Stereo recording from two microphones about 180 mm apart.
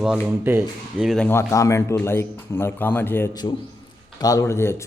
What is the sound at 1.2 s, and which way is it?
Speech, 15° left (ahead or behind).